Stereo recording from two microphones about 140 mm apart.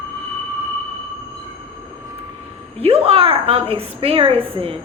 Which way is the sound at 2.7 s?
45° right (ahead or behind).